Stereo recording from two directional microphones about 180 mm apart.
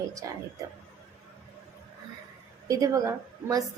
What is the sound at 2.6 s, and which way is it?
A woman's voice, 20° right (ahead or behind).